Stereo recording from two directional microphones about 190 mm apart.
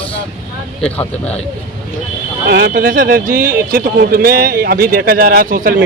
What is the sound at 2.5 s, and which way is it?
A man's voice, 50° right (ahead or behind).